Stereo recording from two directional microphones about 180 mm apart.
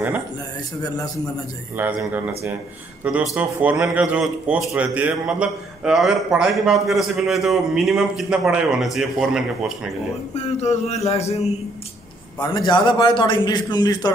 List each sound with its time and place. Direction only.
1.8 s a man's voice: 10° right (ahead or behind)
10.3 s speech: 40° left (ahead or behind)
12.4 s a man's voice: 25° left (ahead or behind)